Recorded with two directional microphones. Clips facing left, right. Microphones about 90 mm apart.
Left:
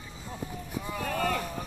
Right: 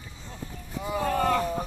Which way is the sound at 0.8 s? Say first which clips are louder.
Right 6 dB; 20° right (ahead or behind).